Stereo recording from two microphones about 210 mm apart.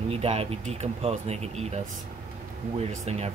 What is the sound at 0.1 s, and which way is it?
Speech, 30° right (ahead or behind).